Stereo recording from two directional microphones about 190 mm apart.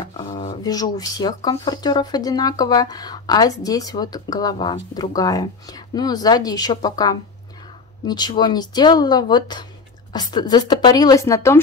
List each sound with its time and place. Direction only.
0.7 s speech: 20° left (ahead or behind)